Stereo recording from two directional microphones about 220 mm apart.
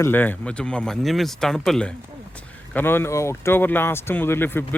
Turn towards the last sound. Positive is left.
turn(degrees=10)  # may be behind; listen again after turning